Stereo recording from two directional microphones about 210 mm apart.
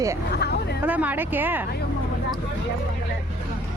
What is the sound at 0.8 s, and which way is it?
Speech, 10° right (ahead or behind).